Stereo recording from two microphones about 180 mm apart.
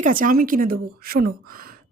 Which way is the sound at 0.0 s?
50° right (ahead or behind).